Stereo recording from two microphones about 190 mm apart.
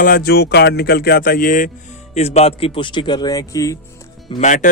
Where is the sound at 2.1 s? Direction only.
35° left (ahead or behind); by 3.7 s 20° left (ahead or behind).